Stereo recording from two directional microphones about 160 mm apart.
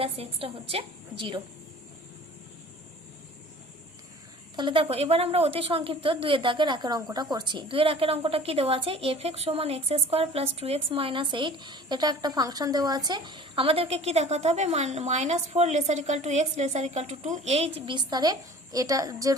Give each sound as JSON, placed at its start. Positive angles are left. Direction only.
{"t": 0.0, "sound": "a woman's voice", "side_deg": -35}
{"t": 4.5, "sound": "a woman's voice", "side_deg": -30}
{"t": 17.7, "sound": "a woman's voice", "side_deg": -30}